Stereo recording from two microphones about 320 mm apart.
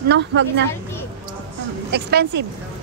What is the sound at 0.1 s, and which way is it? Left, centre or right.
Speech, right.